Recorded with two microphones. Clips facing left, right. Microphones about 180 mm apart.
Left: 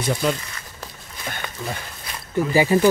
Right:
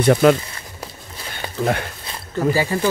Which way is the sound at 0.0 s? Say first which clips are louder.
Right 9 dB; 65° right (ahead or behind).